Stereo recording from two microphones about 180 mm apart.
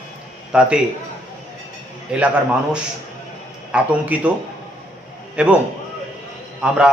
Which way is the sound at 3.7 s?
5° right (ahead or behind).